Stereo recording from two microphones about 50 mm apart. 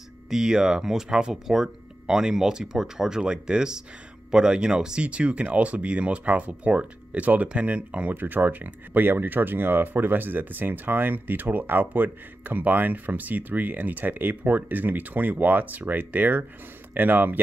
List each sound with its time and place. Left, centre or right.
0.3 s speech: centre
8.1 s speech: right